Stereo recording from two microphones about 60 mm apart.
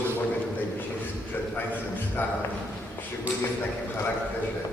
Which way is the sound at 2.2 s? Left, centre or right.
Left.